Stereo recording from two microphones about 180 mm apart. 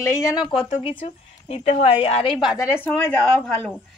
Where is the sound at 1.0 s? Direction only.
35° left (ahead or behind).